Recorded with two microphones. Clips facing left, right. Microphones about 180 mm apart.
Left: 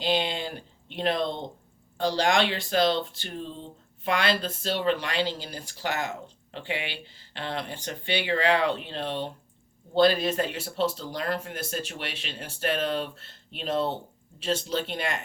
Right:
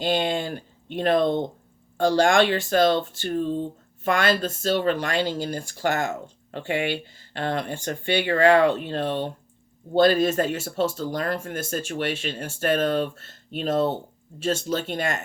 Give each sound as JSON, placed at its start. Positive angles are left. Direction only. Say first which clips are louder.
{"t": 0.0, "sound": "speech", "louder": "right 4 dB", "side_deg": -50}